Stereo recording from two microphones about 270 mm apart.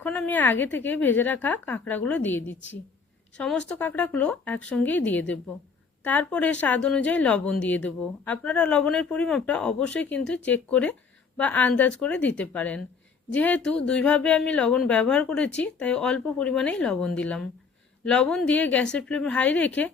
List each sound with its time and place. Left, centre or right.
0.0 s a woman's voice: centre